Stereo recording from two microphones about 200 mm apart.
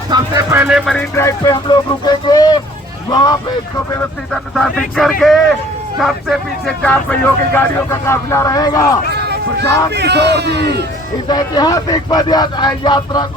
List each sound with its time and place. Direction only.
0.1 s music: 10° right (ahead or behind)
1.1 s speech: 15° left (ahead or behind)
4.5 s speech: centre (ahead or behind)
9.3 s a man's voice: 55° right (ahead or behind)
11.3 s speech: 20° left (ahead or behind)